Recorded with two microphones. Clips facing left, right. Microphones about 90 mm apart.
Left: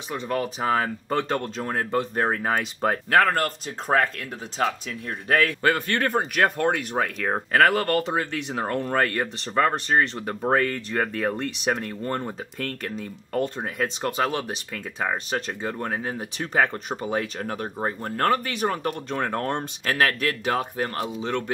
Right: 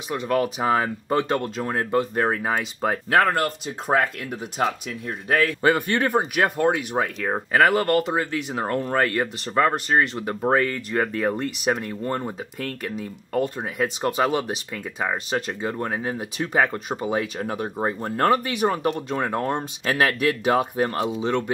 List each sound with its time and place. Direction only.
0.1 s speech: 10° right (ahead or behind)